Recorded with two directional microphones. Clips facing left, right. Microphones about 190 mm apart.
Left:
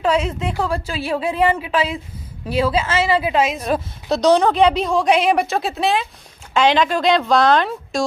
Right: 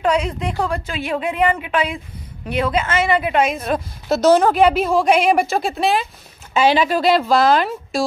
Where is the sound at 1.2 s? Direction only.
30° left (ahead or behind).